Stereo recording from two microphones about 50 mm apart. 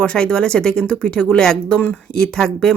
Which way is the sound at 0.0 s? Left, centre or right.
Left.